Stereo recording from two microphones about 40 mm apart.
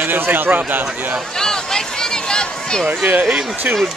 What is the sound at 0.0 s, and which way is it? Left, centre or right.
Speech, right.